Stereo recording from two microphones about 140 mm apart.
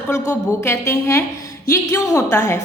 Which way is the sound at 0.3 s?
20° left (ahead or behind).